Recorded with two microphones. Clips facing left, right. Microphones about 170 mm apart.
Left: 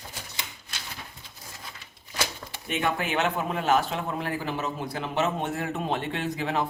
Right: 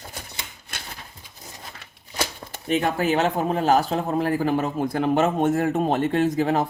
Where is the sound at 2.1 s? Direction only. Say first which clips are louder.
Right 3 dB; 35° right (ahead or behind).